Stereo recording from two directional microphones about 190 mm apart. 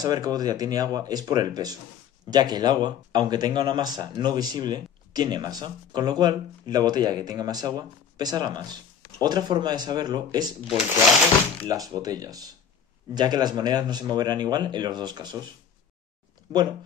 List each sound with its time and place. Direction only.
0.0 s speech: 20° right (ahead or behind)
10.7 s speech: centre (ahead or behind)
11.6 s speech: 20° right (ahead or behind)